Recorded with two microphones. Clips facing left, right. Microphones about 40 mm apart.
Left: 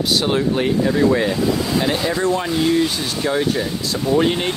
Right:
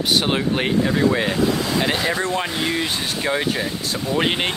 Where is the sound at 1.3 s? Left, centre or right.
Right.